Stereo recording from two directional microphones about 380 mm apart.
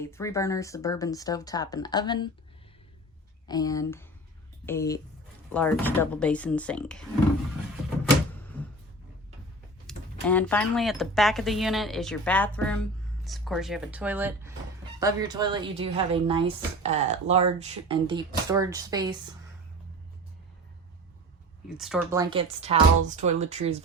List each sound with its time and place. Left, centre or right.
0.0 s speech: centre
3.4 s speech: centre
9.8 s speech: centre
21.8 s speech: centre